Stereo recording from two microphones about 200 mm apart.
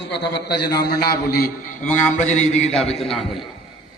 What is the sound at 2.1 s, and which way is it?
Mantra, 35° left (ahead or behind).